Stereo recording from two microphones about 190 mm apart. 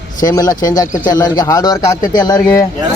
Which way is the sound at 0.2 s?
20° left (ahead or behind).